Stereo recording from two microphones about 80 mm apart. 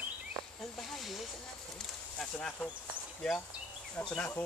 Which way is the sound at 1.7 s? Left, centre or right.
Centre.